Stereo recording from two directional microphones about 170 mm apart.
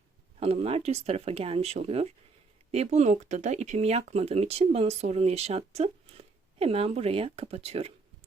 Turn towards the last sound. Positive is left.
turn(degrees=-35)  # may be behind; listen again after turning